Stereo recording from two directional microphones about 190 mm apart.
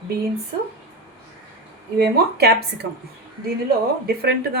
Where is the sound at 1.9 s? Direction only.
55° right (ahead or behind).